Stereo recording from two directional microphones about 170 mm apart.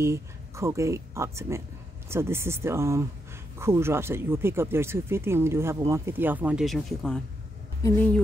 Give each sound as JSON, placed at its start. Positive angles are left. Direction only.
{"t": 0.0, "sound": "speech", "side_deg": -15}
{"t": 7.8, "sound": "speech", "side_deg": 10}